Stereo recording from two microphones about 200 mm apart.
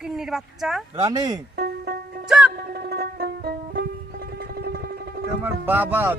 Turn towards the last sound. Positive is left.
turn(degrees=-10)  # may be behind; listen again after turning